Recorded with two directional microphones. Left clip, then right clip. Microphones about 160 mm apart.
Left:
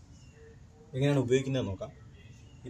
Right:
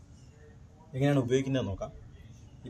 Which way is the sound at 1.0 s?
30° left (ahead or behind).